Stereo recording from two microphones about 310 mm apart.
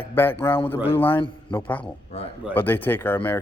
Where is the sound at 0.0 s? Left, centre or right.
Centre.